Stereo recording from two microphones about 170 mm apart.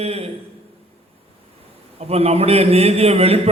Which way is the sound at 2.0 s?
35° right (ahead or behind).